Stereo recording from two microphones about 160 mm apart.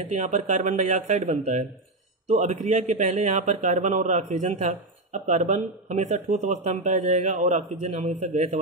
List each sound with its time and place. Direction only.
0.1 s a man's voice: 45° right (ahead or behind)